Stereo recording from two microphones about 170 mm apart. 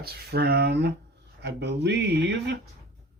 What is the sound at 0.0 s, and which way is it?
Speech, 65° right (ahead or behind).